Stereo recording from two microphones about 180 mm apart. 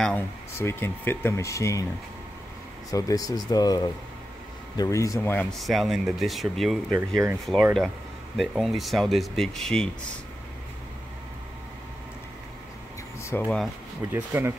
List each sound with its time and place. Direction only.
0.0 s speech: 10° left (ahead or behind)
2.9 s speech: 20° left (ahead or behind)
5.5 s speech: centre (ahead or behind)
8.4 s speech: centre (ahead or behind)
13.2 s speech: 10° left (ahead or behind)
14.1 s speech: 10° right (ahead or behind)